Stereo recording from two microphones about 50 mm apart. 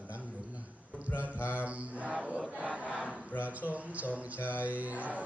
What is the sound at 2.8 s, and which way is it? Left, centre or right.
Battle cry, right.